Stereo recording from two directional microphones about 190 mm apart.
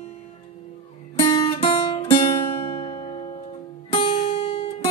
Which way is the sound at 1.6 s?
30° left (ahead or behind).